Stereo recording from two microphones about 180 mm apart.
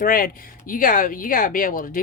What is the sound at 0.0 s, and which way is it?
Speech, 50° left (ahead or behind).